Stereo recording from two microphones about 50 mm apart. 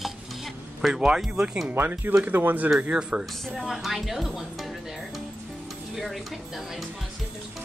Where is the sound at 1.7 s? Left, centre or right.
Right.